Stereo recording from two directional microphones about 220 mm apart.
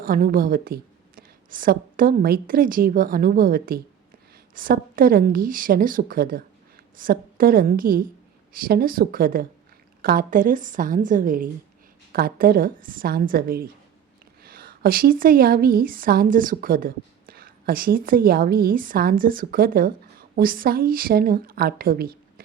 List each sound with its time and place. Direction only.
0.0 s a woman's voice: 40° right (ahead or behind)